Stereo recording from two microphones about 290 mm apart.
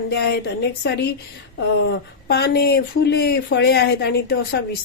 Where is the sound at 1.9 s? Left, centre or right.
Left.